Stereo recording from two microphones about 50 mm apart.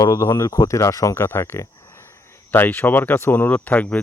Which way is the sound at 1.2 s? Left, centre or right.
Left.